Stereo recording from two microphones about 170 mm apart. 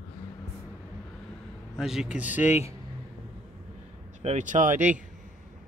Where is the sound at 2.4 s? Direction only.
40° left (ahead or behind).